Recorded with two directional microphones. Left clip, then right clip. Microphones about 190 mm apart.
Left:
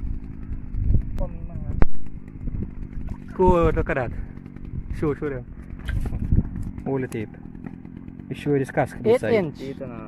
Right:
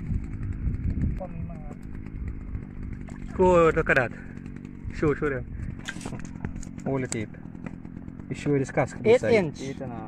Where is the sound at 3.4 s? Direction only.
15° left (ahead or behind).